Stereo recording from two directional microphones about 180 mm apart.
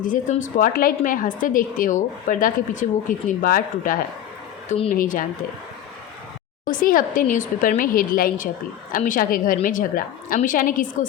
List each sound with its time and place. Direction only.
0.0 s speech: 45° left (ahead or behind)
6.7 s speech: 50° left (ahead or behind)